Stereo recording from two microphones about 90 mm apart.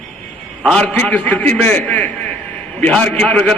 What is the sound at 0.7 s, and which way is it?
A man's voice, 10° left (ahead or behind).